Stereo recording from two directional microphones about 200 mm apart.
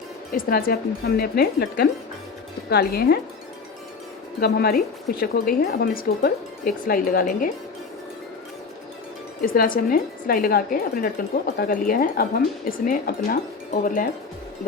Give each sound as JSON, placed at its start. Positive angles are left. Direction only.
{"t": 0.3, "sound": "a woman's voice", "side_deg": 45}
{"t": 4.4, "sound": "a woman's voice", "side_deg": 50}
{"t": 9.4, "sound": "a woman's voice", "side_deg": 45}